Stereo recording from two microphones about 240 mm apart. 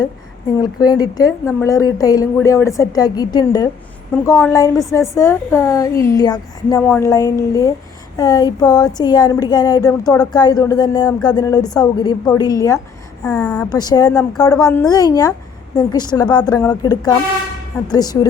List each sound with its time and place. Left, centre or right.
0.6 s a woman's voice: centre
13.7 s a woman's voice: centre